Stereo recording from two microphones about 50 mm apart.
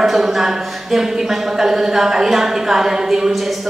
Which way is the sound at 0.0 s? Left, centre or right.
Centre.